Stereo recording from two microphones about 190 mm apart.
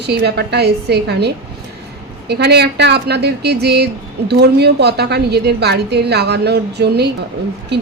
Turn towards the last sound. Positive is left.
turn(degrees=-60)  # may be behind; listen again after turning